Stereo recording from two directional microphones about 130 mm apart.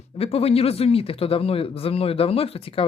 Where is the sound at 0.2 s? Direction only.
50° left (ahead or behind).